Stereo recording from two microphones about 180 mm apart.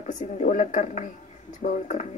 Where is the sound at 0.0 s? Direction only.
40° left (ahead or behind).